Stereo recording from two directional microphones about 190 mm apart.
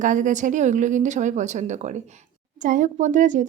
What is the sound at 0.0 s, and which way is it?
A woman's voice, 40° right (ahead or behind).